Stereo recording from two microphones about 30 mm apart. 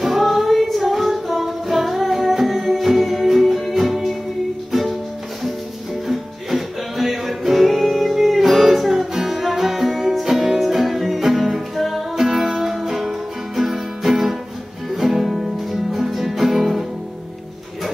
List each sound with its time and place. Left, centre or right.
0.0 s music: centre
6.0 s music: centre
8.9 s music: right
9.3 s music: centre